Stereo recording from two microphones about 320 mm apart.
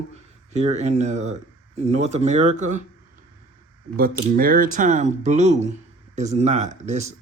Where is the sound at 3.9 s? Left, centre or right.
Right.